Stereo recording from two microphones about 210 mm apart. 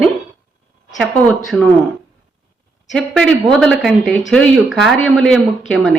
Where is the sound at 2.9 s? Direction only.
Centre (ahead or behind).